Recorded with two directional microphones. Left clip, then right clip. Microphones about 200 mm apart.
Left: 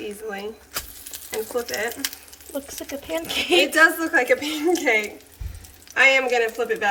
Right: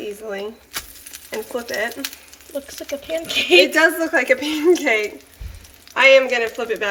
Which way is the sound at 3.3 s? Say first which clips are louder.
Right 5 dB; 10° right (ahead or behind).